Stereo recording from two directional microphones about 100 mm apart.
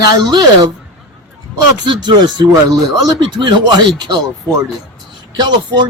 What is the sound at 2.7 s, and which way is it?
Speech, 40° right (ahead or behind).